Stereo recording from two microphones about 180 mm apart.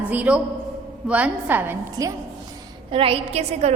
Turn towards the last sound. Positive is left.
turn(degrees=-35)  # may be behind; listen again after turning